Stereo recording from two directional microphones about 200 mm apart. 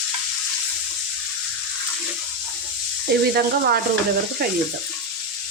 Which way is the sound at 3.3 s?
50° right (ahead or behind).